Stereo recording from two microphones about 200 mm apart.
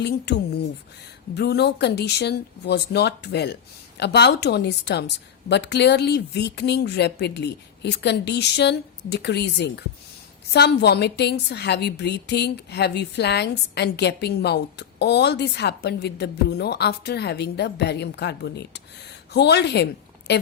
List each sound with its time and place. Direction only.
0.0 s a woman's voice: 60° left (ahead or behind)